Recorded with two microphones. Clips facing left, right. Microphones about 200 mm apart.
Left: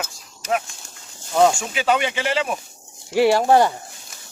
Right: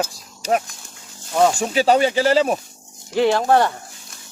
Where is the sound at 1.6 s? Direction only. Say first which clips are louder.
Right 5 dB; 35° right (ahead or behind).